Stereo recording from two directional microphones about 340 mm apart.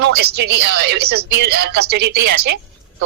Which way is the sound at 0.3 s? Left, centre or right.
Right.